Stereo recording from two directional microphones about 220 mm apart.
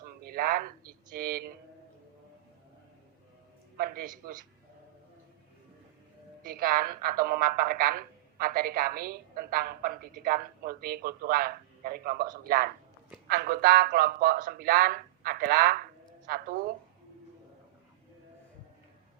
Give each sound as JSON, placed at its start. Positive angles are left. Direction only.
{"t": 0.2, "sound": "speech", "side_deg": -40}
{"t": 3.8, "sound": "a woman's voice", "side_deg": -40}
{"t": 6.4, "sound": "a woman's voice", "side_deg": -40}